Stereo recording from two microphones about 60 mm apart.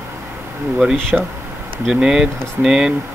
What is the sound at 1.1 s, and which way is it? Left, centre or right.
Speech, centre.